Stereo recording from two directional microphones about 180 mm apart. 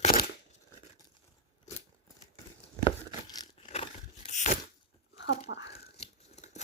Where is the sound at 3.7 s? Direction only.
35° left (ahead or behind).